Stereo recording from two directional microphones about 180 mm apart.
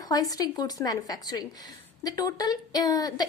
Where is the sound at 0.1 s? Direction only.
20° left (ahead or behind).